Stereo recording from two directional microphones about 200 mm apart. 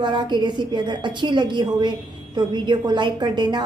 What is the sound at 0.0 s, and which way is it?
A woman's voice, 20° right (ahead or behind).